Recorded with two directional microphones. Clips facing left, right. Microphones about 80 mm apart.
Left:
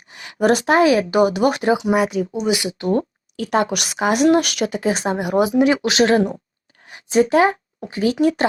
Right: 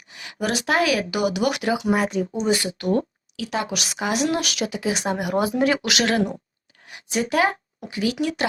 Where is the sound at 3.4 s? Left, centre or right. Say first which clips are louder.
Left 7 dB; left.